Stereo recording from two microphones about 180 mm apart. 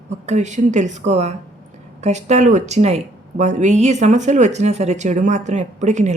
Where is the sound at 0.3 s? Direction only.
40° right (ahead or behind).